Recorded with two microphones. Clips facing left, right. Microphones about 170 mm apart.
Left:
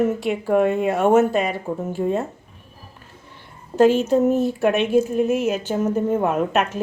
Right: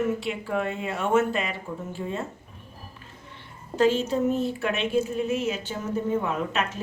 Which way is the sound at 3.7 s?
45° left (ahead or behind).